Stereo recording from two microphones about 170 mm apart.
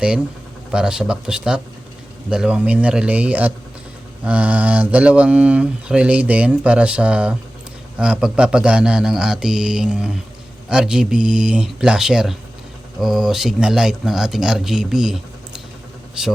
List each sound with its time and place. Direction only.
0.7 s speech: 5° right (ahead or behind)